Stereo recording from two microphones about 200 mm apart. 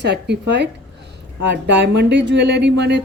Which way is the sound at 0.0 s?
55° right (ahead or behind).